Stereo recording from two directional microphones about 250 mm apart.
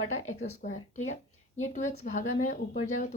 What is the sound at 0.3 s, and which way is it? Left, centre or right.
Speech, left.